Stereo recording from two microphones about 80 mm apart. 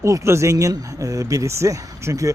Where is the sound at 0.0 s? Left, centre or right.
Right.